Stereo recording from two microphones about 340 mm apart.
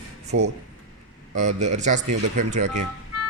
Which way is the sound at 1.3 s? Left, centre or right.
Centre.